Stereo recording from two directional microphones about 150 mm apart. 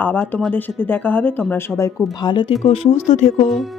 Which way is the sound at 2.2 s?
30° left (ahead or behind).